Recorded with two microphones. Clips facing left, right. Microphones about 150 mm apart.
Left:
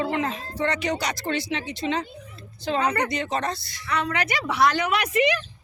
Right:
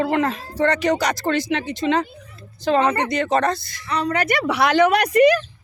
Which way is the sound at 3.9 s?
40° right (ahead or behind).